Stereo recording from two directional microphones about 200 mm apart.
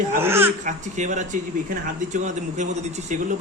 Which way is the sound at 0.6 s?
35° right (ahead or behind).